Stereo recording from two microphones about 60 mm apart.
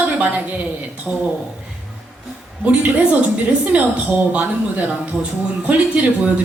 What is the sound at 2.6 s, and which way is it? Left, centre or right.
Speech, right.